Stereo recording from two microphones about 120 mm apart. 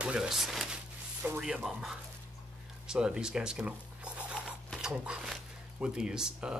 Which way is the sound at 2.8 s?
5° right (ahead or behind).